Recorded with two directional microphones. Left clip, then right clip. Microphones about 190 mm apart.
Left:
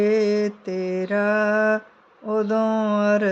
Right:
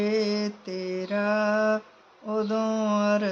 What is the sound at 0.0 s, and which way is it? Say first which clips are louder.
Mantra: left 7 dB; 40° left (ahead or behind).